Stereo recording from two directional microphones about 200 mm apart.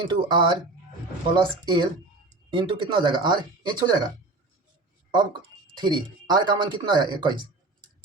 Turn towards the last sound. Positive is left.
turn(degrees=-20)  # may be behind; listen again after turning